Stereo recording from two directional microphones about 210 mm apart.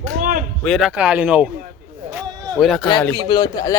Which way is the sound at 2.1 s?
Centre (ahead or behind).